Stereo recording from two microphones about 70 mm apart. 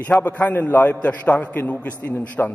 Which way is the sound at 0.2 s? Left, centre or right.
Left.